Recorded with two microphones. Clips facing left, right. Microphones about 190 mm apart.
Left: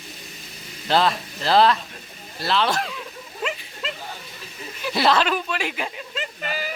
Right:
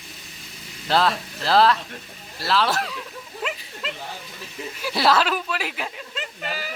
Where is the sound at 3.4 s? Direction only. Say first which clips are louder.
Left 2 dB; 5° right (ahead or behind).